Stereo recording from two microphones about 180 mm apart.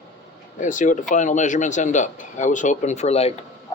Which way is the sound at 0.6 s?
45° left (ahead or behind).